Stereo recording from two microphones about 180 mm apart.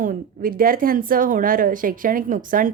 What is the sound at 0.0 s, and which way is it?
A woman's voice, 50° right (ahead or behind).